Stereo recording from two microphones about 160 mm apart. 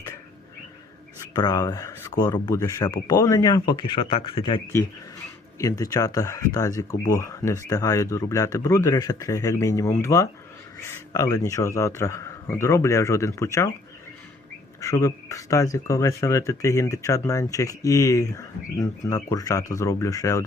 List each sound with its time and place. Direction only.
1.3 s speech: 25° left (ahead or behind)
5.5 s speech: 20° left (ahead or behind)
14.8 s speech: 20° left (ahead or behind)